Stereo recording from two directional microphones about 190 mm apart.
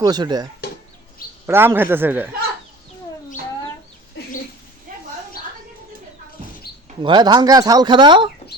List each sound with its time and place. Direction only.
0.0 s speech: 20° right (ahead or behind)
1.5 s speech: 10° right (ahead or behind)
7.0 s speech: 25° right (ahead or behind)